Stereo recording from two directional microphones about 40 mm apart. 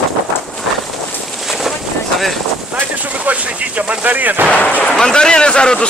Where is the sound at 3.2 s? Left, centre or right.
Right.